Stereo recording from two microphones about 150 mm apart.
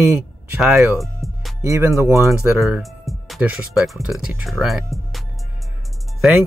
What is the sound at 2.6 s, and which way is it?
Speech, centre (ahead or behind).